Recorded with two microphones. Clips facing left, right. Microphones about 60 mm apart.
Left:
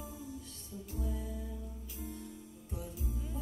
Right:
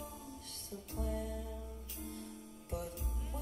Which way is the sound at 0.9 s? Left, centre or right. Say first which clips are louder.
Right 2 dB; right.